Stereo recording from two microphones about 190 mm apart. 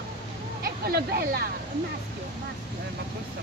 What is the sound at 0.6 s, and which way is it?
Speech, 55° right (ahead or behind).